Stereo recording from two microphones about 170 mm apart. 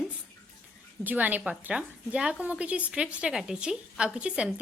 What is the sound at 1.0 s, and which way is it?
A woman's voice, 10° right (ahead or behind).